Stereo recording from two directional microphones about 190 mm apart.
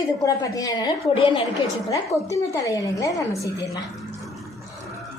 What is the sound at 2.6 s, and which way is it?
Speech, 15° left (ahead or behind).